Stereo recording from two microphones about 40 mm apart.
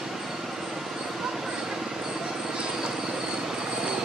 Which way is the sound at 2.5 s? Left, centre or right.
Centre.